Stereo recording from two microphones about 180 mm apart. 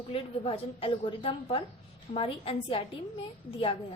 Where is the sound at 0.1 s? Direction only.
30° left (ahead or behind).